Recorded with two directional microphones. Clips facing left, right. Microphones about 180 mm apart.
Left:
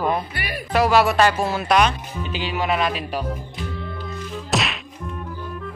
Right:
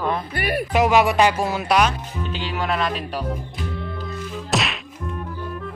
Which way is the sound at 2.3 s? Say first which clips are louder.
Left 2 dB; 5° left (ahead or behind).